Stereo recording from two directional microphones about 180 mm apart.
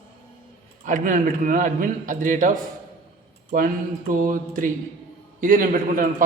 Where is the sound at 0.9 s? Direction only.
45° right (ahead or behind).